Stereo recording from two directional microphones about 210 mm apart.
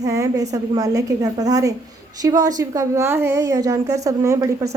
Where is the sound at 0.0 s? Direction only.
15° right (ahead or behind).